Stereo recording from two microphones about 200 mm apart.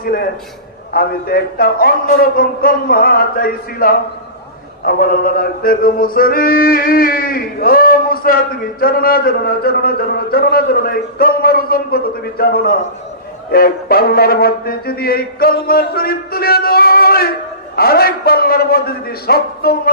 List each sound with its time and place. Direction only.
0.0 s a man's voice: 50° left (ahead or behind)
0.9 s music: 50° left (ahead or behind)